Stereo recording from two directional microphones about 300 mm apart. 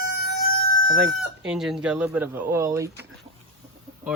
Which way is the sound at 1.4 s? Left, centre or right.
Centre.